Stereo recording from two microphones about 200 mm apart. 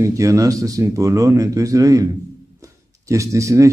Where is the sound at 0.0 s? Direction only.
15° right (ahead or behind).